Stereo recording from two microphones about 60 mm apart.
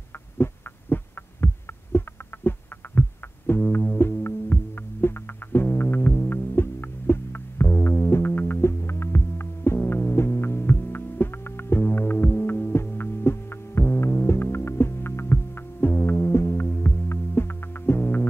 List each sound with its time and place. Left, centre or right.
0.4 s heart sounds: left
5.0 s music: left
8.5 s throbbing: left
9.8 s hum: left